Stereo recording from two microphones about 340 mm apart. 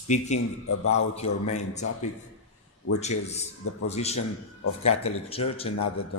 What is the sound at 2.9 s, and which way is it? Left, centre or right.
A man's voice, centre.